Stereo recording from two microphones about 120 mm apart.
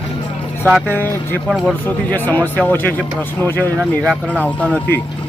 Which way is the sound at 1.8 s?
15° left (ahead or behind).